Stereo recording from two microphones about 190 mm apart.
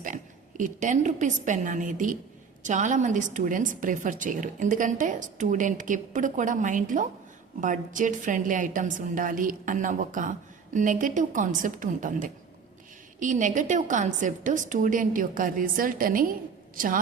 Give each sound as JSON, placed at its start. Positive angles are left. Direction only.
{"t": 0.0, "sound": "a woman's voice", "side_deg": -45}